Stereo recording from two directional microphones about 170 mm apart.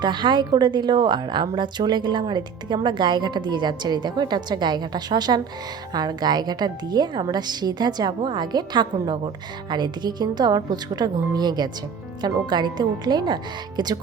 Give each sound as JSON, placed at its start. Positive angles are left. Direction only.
{"t": 0.0, "sound": "a woman's voice", "side_deg": -25}